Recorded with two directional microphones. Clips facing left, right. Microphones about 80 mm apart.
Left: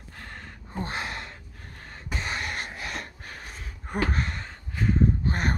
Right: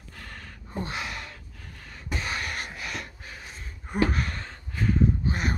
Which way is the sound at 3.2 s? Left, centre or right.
Left.